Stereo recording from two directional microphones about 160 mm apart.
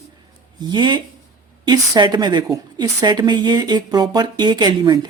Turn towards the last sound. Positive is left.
turn(degrees=-25)  # may be behind; listen again after turning